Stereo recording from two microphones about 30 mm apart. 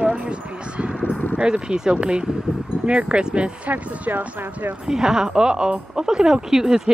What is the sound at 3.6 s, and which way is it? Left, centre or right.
Speech, right.